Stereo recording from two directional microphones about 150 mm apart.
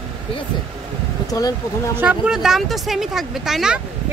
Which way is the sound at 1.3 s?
25° left (ahead or behind).